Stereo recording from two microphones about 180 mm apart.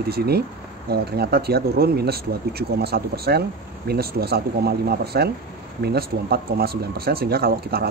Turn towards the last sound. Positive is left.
turn(degrees=-60)  # may be behind; listen again after turning